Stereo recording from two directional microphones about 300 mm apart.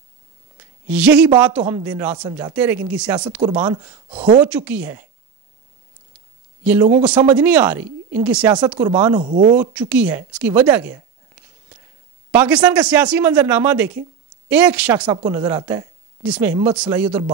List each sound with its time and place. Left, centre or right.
0.8 s a man's voice: centre
4.4 s a man's voice: centre
6.6 s a man's voice: centre
9.2 s speech: right
9.6 s a man's voice: centre
12.3 s a man's voice: centre